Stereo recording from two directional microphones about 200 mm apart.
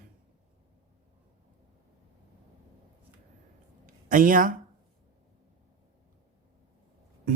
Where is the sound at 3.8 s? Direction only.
40° right (ahead or behind).